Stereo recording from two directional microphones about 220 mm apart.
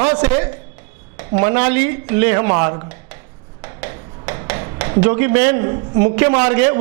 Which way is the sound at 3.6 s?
15° right (ahead or behind).